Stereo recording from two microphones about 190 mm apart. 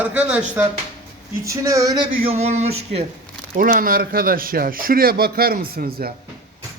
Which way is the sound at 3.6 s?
45° right (ahead or behind).